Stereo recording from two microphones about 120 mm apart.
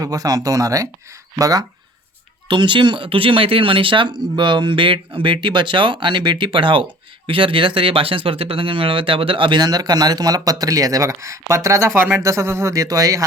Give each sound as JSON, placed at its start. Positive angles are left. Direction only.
{"t": 0.0, "sound": "speech", "side_deg": -30}
{"t": 2.5, "sound": "speech", "side_deg": -40}